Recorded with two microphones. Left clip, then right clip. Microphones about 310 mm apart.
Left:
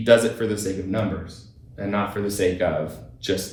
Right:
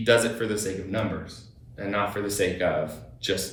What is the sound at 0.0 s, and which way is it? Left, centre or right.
Speech, centre.